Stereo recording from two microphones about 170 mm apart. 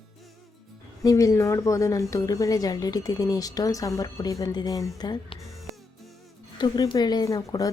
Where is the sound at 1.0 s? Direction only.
20° left (ahead or behind).